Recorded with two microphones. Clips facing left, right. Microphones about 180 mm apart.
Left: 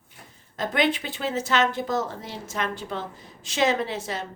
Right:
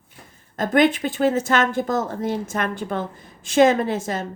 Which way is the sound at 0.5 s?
50° right (ahead or behind).